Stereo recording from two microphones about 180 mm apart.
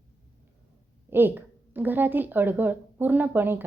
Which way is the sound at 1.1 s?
10° right (ahead or behind).